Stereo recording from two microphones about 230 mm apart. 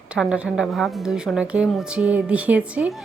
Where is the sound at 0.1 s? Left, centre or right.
Centre.